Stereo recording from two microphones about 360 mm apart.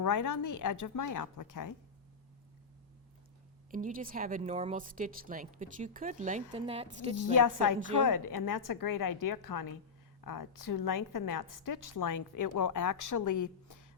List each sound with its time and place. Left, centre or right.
0.0 s a woman's voice: left
3.7 s a woman's voice: right
7.3 s a woman's voice: left